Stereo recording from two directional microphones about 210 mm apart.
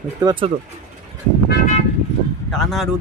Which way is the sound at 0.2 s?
20° right (ahead or behind).